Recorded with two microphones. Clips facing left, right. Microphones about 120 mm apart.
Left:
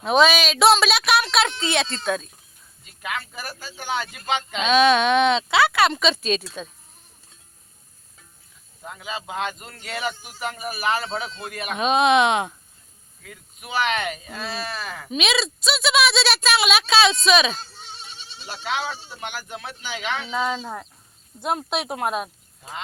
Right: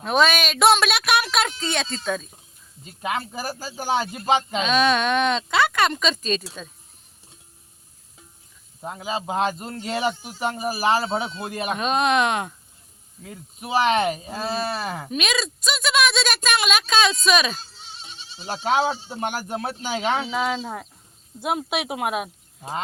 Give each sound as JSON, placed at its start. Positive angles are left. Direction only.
{"t": 0.0, "sound": "a woman's voice", "side_deg": 0}
{"t": 2.8, "sound": "speech", "side_deg": -30}
{"t": 4.6, "sound": "speech", "side_deg": 0}
{"t": 8.8, "sound": "a man's voice", "side_deg": -30}
{"t": 11.8, "sound": "a woman's voice", "side_deg": 5}
{"t": 13.2, "sound": "speech", "side_deg": -30}
{"t": 15.1, "sound": "a woman's voice", "side_deg": 10}
{"t": 18.3, "sound": "speech", "side_deg": -40}
{"t": 20.2, "sound": "speech", "side_deg": -10}